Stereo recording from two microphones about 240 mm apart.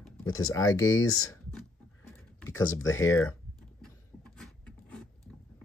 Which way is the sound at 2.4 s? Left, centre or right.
Left.